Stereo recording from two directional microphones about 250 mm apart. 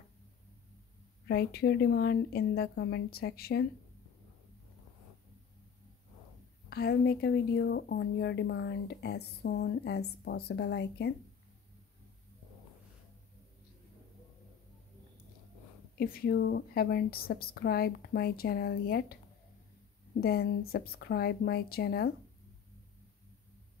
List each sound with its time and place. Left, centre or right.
1.2 s speech: left
6.7 s speech: left
16.0 s speech: left
20.2 s speech: left